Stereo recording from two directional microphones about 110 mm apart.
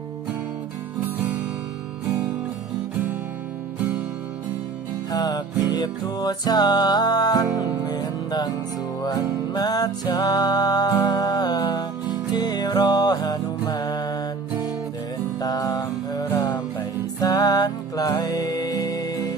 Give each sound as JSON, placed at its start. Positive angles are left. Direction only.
{"t": 3.8, "sound": "music", "side_deg": -10}
{"t": 5.1, "sound": "music", "side_deg": 35}
{"t": 9.6, "sound": "music", "side_deg": 35}
{"t": 15.4, "sound": "music", "side_deg": 35}